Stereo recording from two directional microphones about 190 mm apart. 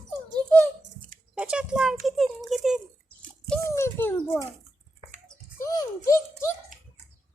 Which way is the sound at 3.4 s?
10° left (ahead or behind).